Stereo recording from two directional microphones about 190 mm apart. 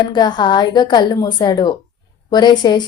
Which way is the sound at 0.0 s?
25° left (ahead or behind).